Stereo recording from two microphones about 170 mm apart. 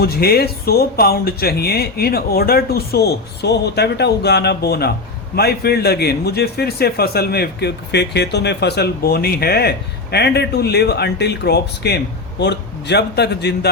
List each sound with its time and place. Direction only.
0.0 s a man's voice: 65° left (ahead or behind)
12.4 s a man's voice: 85° left